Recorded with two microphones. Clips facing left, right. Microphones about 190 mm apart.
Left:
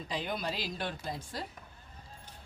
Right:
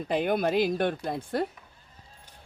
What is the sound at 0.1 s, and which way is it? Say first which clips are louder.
Speech: right 11 dB; 55° right (ahead or behind).